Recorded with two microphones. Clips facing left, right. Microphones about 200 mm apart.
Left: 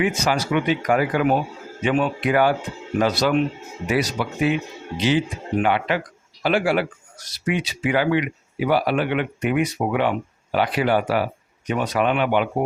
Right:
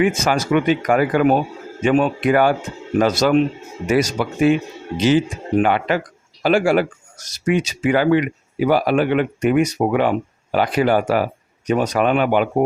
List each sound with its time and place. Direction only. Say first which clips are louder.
0.0 s speech: right 4 dB; 50° right (ahead or behind)